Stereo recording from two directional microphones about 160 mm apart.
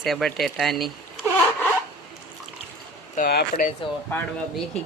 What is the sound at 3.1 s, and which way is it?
Speech, 65° left (ahead or behind).